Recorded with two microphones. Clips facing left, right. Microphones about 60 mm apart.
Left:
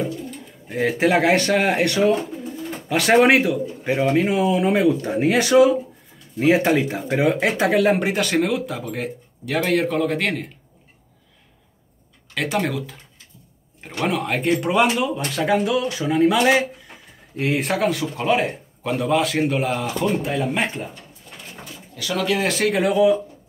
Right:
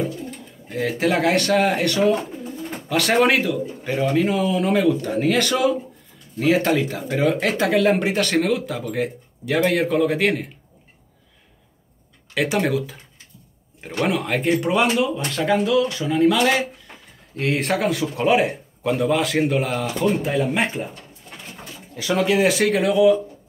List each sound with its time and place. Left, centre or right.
0.1 s pigeon: right
0.4 s a man's voice: left; by 10.5 s centre
12.4 s a man's voice: centre
14.0 s a man's voice: centre
21.9 s speech: right
22.4 s a man's voice: centre